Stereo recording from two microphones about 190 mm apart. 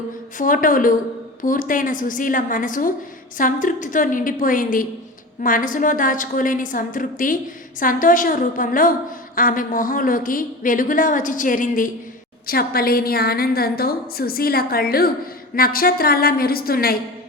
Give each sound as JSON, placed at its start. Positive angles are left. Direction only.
{"t": 0.3, "sound": "a woman's voice", "side_deg": 45}